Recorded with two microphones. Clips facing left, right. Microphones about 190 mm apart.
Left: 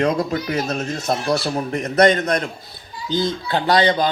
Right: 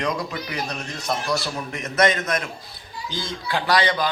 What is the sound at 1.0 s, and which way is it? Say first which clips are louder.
Speech: left 4 dB; 25° left (ahead or behind).